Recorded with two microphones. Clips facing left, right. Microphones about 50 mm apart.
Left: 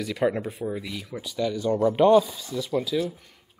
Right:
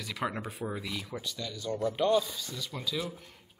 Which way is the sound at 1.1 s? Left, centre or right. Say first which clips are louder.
Left 10 dB; centre.